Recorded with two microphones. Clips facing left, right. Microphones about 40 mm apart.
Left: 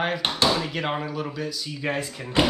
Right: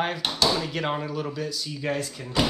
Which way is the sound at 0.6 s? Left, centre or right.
Centre.